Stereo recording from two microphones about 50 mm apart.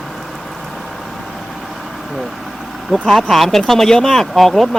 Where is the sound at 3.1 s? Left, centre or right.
Centre.